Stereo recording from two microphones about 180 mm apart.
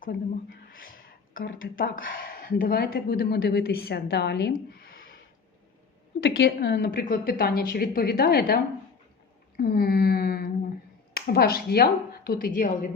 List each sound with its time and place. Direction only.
1.3 s speech: 50° left (ahead or behind); by 4.5 s 70° left (ahead or behind)
6.2 s a woman's voice: 70° left (ahead or behind)
7.1 s speech: 55° left (ahead or behind)
9.6 s a sound: 55° left (ahead or behind)
11.1 s speech: 60° left (ahead or behind)